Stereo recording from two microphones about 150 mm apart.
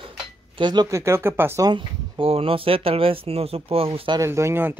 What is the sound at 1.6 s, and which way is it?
Speech, 35° right (ahead or behind).